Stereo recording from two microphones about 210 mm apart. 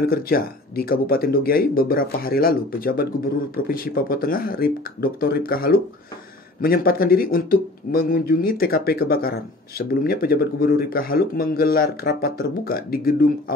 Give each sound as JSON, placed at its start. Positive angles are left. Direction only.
{"t": 0.0, "sound": "speech", "side_deg": 45}